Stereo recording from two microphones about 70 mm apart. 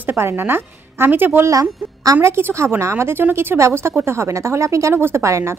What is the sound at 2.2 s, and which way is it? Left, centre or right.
A woman's voice, right.